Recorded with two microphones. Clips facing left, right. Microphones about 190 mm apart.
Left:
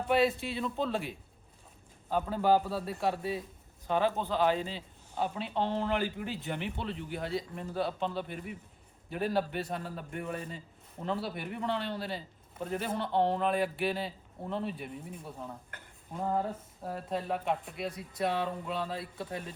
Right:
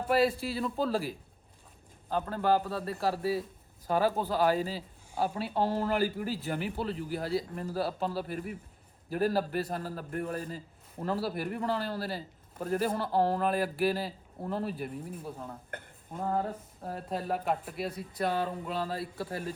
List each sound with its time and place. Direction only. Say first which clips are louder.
0.1 s speech: right 1 dB; centre (ahead or behind)
15.7 s a sound: right 9 dB; 55° right (ahead or behind)
16.8 s speech: even; centre (ahead or behind)